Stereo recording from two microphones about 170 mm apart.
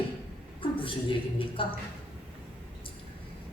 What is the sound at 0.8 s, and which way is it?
Speech, 30° left (ahead or behind).